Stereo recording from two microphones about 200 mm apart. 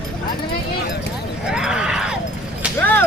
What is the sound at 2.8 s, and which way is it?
Speech, 10° left (ahead or behind).